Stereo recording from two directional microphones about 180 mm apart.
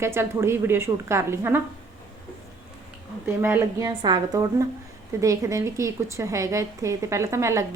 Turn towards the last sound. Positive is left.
turn(degrees=-15)  # may be behind; listen again after turning